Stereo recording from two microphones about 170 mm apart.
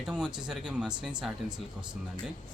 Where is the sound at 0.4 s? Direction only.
5° right (ahead or behind).